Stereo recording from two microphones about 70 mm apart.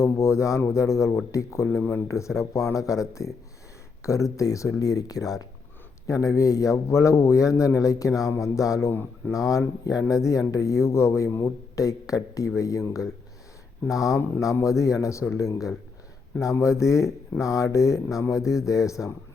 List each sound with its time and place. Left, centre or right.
0.0 s a man's voice: left
8.9 s speech: left
9.3 s a man's voice: left
11.8 s a man's voice: left
16.4 s a man's voice: left